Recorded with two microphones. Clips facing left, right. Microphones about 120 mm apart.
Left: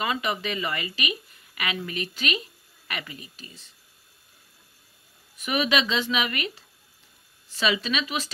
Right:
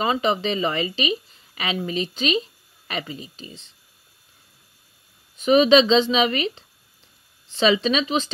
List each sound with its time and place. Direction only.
0.0 s a woman's voice: 25° right (ahead or behind)
5.4 s a woman's voice: 25° right (ahead or behind)